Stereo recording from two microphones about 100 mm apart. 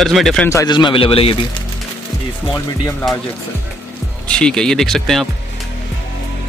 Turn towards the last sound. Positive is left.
turn(degrees=5)  # may be behind; listen again after turning